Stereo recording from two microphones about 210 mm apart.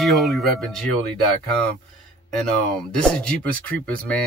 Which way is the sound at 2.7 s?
5° left (ahead or behind).